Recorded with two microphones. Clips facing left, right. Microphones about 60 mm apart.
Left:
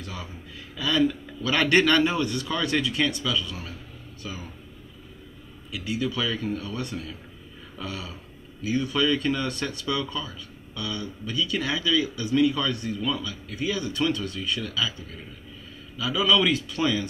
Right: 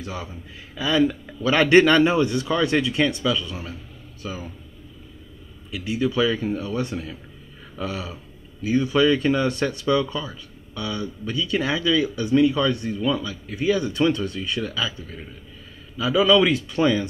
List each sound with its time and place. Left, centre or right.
0.0 s a man's voice: centre
5.7 s a man's voice: right